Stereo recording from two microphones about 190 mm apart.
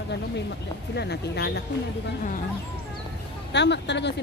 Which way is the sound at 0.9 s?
60° left (ahead or behind).